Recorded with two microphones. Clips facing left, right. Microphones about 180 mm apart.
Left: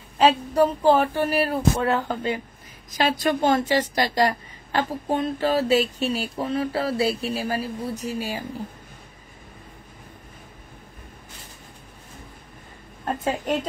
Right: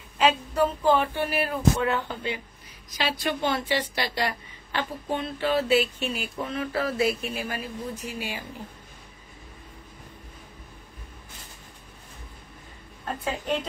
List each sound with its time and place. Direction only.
0.2 s a woman's voice: 35° left (ahead or behind)
13.0 s a woman's voice: 45° left (ahead or behind)